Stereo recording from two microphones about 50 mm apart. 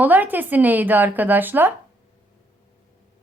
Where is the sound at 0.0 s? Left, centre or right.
Right.